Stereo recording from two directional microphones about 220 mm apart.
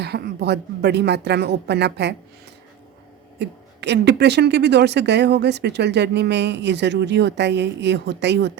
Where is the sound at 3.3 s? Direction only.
50° right (ahead or behind).